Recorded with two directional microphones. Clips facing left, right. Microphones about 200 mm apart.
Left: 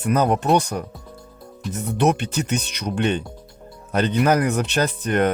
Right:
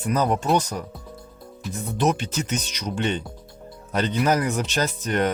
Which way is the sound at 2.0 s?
65° left (ahead or behind).